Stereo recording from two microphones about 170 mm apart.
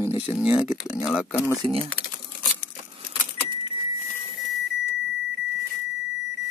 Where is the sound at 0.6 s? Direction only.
5° right (ahead or behind).